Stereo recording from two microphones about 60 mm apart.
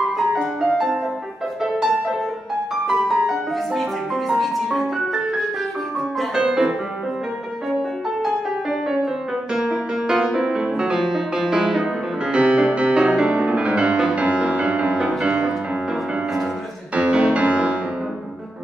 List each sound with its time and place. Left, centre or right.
0.3 s music: centre
6.3 s music: centre
8.2 s music: centre
16.9 s music: centre